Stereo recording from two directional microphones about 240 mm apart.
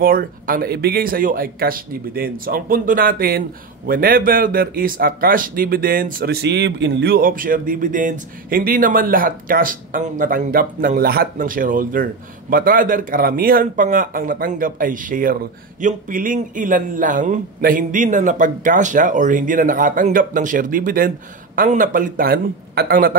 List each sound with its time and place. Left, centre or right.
0.0 s speech: right